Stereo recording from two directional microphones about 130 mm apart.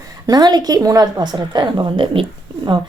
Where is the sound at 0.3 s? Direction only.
30° right (ahead or behind).